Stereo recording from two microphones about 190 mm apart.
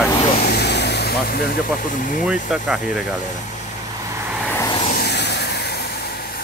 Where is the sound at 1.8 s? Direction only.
45° left (ahead or behind).